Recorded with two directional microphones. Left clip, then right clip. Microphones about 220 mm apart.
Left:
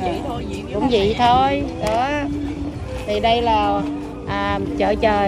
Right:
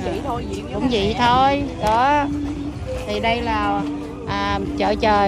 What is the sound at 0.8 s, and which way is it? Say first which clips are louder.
Speech: left 2 dB; 15° right (ahead or behind).